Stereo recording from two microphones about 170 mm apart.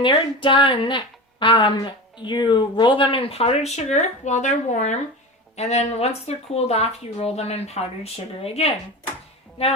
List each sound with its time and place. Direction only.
0.0 s speech: 30° left (ahead or behind)